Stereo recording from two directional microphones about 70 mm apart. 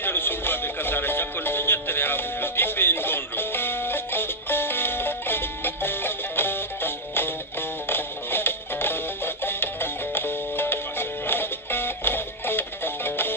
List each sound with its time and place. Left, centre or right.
0.0 s music: left